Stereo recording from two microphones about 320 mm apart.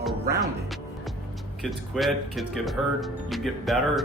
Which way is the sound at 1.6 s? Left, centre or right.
Centre.